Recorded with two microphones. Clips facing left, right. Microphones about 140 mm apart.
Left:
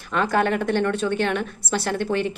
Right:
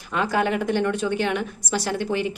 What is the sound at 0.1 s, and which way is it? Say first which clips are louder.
A woman's voice: left 1 dB; 15° right (ahead or behind).